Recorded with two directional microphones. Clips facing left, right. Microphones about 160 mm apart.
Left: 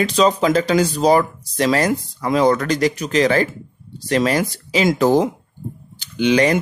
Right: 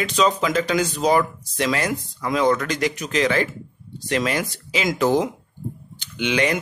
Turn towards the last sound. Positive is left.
turn(degrees=35)  # may be behind; listen again after turning